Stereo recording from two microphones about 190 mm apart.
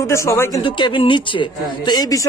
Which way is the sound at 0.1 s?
15° left (ahead or behind).